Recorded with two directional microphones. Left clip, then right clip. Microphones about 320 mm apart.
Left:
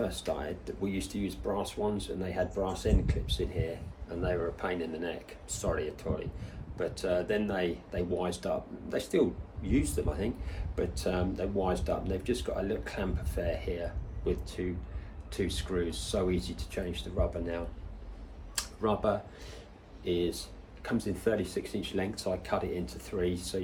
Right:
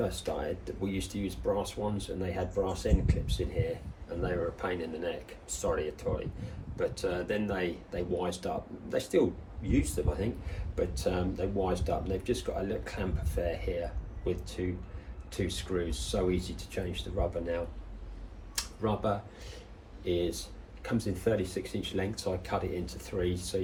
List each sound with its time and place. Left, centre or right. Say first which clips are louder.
0.0 s speech: even; centre
18.5 s a sound: left 2 dB; centre
20.1 s speech: even; centre